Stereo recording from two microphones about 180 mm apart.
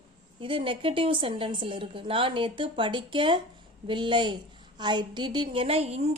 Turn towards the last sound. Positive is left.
turn(degrees=-35)  # may be behind; listen again after turning